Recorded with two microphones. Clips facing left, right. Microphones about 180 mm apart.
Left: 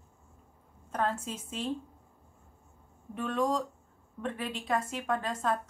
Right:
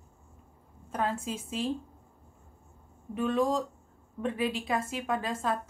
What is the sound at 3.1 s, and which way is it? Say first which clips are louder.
Speech: right 3 dB; 5° right (ahead or behind).